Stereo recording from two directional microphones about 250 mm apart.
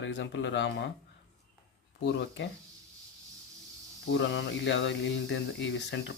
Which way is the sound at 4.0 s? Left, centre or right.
Left.